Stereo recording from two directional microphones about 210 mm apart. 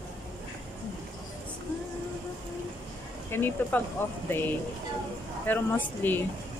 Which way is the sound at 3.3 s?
10° left (ahead or behind).